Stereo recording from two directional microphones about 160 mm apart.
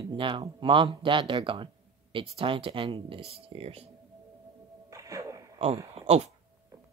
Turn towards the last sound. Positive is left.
turn(degrees=-40)  # may be behind; listen again after turning